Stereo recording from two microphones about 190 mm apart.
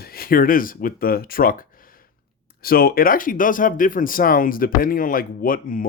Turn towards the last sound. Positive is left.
turn(degrees=45)  # may be behind; listen again after turning